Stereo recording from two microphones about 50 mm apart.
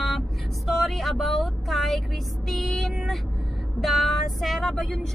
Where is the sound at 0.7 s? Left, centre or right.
Centre.